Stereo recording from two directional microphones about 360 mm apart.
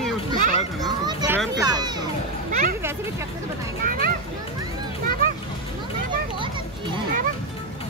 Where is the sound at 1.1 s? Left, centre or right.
Centre.